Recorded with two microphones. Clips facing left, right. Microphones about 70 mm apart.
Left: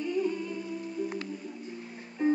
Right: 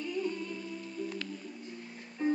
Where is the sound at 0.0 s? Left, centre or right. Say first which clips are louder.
Left 5 dB; centre.